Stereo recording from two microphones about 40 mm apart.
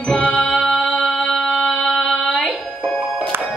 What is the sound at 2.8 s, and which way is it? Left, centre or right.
Music, left.